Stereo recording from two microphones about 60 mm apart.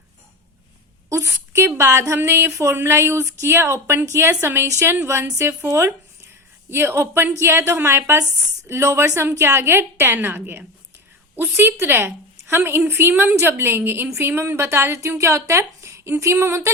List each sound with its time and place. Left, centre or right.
1.1 s a sound: right
1.8 s a woman's voice: right
2.1 s a woman's voice: right
2.7 s a woman's voice: right
4.3 s a woman's voice: right